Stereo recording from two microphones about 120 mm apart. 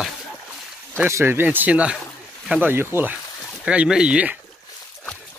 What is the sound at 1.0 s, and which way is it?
Speech, 20° right (ahead or behind).